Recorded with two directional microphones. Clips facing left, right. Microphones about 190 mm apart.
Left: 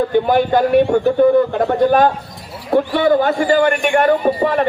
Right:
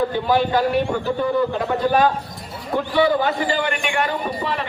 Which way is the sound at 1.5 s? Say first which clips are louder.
Left 5 dB; 55° left (ahead or behind).